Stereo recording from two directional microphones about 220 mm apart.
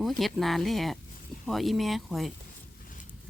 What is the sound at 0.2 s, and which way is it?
Speech, centre (ahead or behind).